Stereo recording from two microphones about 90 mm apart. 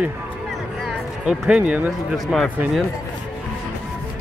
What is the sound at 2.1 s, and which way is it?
Speech, centre (ahead or behind).